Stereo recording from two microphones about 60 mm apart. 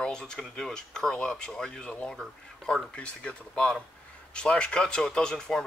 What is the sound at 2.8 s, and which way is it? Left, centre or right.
Speech, centre.